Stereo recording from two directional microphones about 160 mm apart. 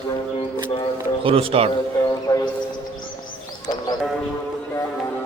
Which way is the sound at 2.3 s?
25° left (ahead or behind).